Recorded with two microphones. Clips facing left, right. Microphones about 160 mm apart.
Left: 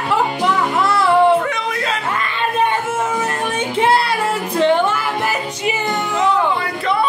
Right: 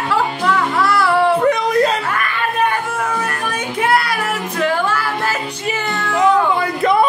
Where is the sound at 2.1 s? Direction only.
20° left (ahead or behind).